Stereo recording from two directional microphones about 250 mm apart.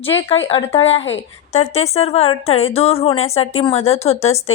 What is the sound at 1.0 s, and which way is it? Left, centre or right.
Speech, left.